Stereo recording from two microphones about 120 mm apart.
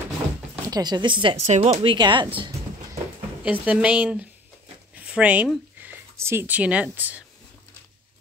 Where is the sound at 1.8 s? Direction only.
40° right (ahead or behind).